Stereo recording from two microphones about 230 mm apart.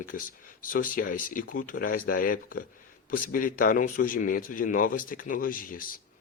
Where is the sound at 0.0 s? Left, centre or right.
Left.